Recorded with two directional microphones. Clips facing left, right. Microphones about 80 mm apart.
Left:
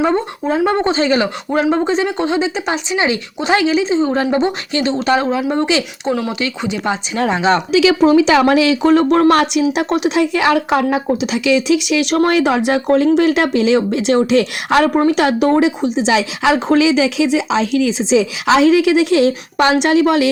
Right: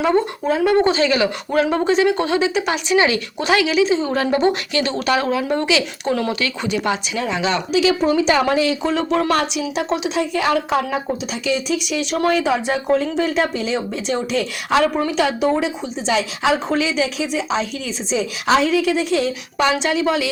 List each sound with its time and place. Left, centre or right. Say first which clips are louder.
0.0 s speech: left 1 dB; left
6.1 s speech: left 2 dB; centre
7.3 s speech: left 6 dB; left
7.7 s a woman's voice: left 5 dB; left
10.9 s a woman's voice: left 6 dB; left